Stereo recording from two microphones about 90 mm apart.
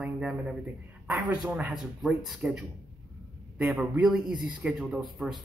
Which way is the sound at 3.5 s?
15° right (ahead or behind).